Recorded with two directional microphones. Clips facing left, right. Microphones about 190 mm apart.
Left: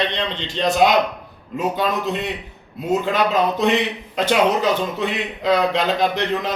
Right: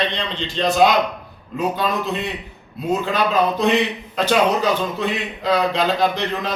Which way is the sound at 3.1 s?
25° left (ahead or behind).